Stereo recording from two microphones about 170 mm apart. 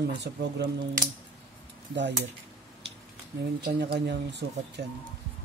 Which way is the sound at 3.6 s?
70° right (ahead or behind).